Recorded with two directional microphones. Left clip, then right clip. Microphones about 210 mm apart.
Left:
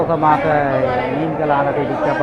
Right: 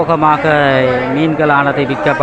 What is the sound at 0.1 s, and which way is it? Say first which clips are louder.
Speech: right 4 dB; 15° right (ahead or behind).